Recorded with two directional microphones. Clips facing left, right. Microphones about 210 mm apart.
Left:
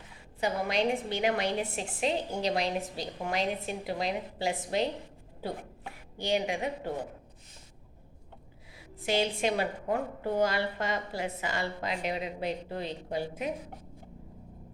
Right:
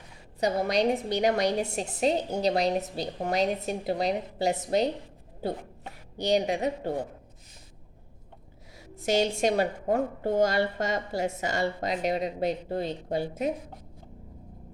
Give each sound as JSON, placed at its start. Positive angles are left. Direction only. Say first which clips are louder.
{"t": 0.3, "sound": "a woman's voice", "louder": "right 4 dB", "side_deg": -40}
{"t": 6.1, "sound": "a woman's voice", "louder": "right 5 dB", "side_deg": -40}
{"t": 9.0, "sound": "a woman's voice", "louder": "right 4 dB", "side_deg": -40}